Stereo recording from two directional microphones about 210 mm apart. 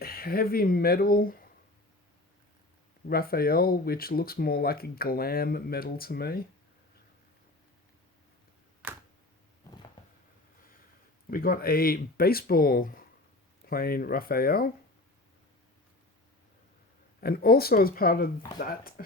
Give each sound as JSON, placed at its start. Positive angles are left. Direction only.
{"t": 0.0, "sound": "speech", "side_deg": 45}
{"t": 3.1, "sound": "speech", "side_deg": 45}
{"t": 11.3, "sound": "speech", "side_deg": 45}
{"t": 17.2, "sound": "speech", "side_deg": 45}